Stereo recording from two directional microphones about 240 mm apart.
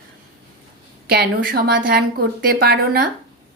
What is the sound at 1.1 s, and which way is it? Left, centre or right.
A woman's voice, right.